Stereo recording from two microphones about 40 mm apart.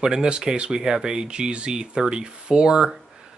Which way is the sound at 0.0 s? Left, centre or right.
Centre.